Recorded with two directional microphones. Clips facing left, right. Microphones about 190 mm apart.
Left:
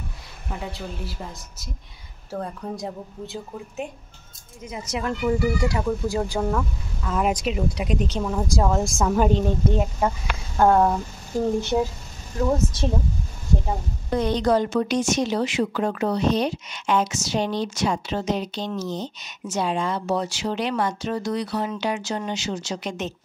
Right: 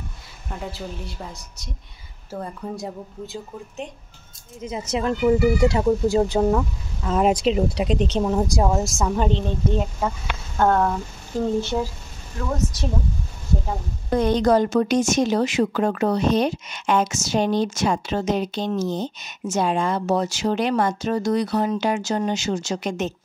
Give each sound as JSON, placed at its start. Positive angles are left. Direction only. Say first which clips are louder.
{"t": 0.5, "sound": "a woman's voice", "louder": "right 1 dB", "side_deg": 0}
{"t": 4.6, "sound": "speech", "louder": "right 4 dB", "side_deg": -25}
{"t": 8.8, "sound": "speech", "louder": "left 2 dB", "side_deg": 0}
{"t": 14.1, "sound": "speech", "louder": "right 3 dB", "side_deg": -50}